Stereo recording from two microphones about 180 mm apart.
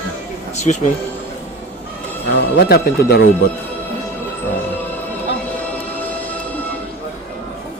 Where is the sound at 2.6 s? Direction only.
65° left (ahead or behind).